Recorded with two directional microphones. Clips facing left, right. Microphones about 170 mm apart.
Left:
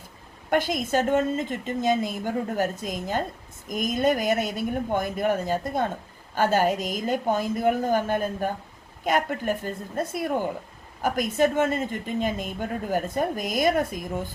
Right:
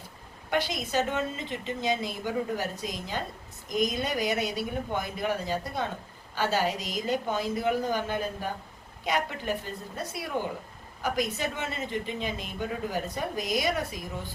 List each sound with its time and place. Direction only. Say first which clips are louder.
0.5 s a woman's voice: left 5 dB; 50° left (ahead or behind)